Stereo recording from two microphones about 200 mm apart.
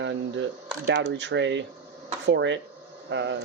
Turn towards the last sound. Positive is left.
turn(degrees=-60)  # may be behind; listen again after turning